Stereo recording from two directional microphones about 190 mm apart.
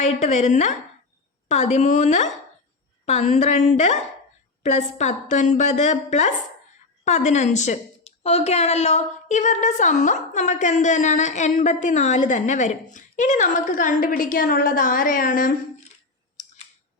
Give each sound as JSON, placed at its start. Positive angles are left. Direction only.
{"t": 0.0, "sound": "a woman's voice", "side_deg": 40}